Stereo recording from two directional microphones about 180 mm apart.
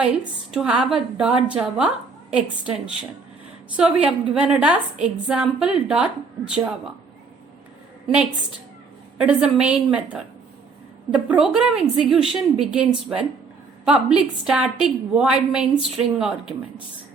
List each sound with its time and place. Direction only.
0.0 s a woman's voice: 5° right (ahead or behind)
9.2 s a woman's voice: 5° right (ahead or behind)